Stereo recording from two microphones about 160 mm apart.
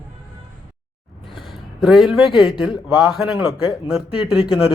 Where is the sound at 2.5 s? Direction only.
5° right (ahead or behind).